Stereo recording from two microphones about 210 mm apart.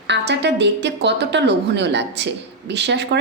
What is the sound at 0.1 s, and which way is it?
A woman's voice, 55° right (ahead or behind).